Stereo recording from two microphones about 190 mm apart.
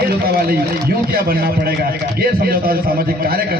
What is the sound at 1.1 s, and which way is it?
A man's voice, 50° right (ahead or behind).